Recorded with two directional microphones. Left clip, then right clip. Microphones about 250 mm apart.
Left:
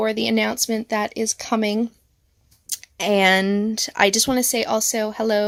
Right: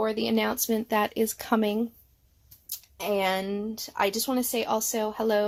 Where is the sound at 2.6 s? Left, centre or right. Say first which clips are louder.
Left 8 dB; left.